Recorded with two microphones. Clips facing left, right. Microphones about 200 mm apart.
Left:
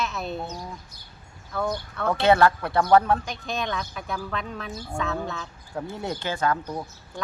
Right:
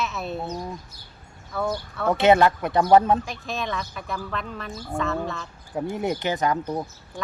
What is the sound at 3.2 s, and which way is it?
A woman's voice, centre (ahead or behind).